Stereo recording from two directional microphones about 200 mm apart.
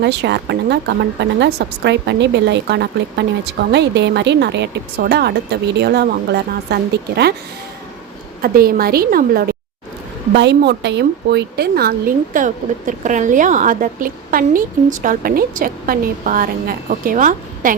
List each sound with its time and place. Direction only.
0.0 s a woman's voice: 60° right (ahead or behind)
8.4 s a woman's voice: 50° right (ahead or behind)